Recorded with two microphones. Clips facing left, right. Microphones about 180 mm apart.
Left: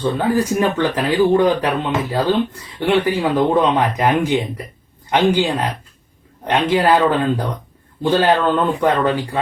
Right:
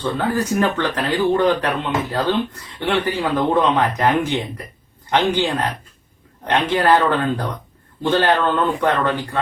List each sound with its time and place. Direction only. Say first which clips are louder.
0.0 s speech: left 3 dB; 10° left (ahead or behind)